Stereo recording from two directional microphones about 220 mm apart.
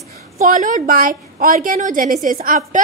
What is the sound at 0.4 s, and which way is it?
A woman's voice, 40° right (ahead or behind).